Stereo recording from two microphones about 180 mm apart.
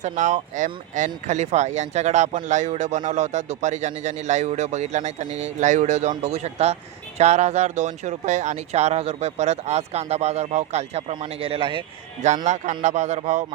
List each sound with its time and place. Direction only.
0.0 s speech: 40° right (ahead or behind)
12.5 s speech: 40° right (ahead or behind)